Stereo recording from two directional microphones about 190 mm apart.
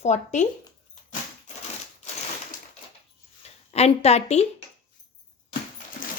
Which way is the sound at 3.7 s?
35° left (ahead or behind).